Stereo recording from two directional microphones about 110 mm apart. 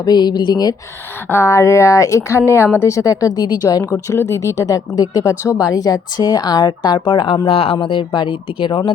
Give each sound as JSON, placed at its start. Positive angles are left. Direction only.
{"t": 0.0, "sound": "speech", "side_deg": 40}
{"t": 1.3, "sound": "speech", "side_deg": 25}
{"t": 3.8, "sound": "speech", "side_deg": 25}
{"t": 7.4, "sound": "speech", "side_deg": 60}